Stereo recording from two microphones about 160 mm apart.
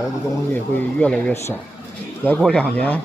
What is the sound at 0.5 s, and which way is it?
Speech, 10° left (ahead or behind).